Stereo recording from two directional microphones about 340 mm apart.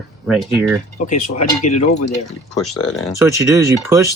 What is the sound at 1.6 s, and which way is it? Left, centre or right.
Speech, centre.